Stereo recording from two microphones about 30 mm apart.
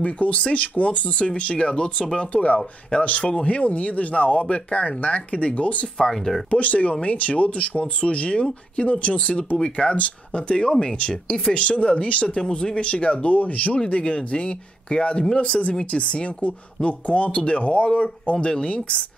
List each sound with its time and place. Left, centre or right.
0.0 s speech: left
2.1 s speech: left
5.9 s speech: centre
6.5 s speech: left
6.9 s speech: left
12.4 s speech: centre
12.7 s speech: left
13.8 s speech: left